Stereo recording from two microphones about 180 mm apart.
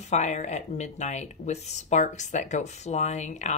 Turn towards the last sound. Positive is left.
turn(degrees=40)  # may be behind; listen again after turning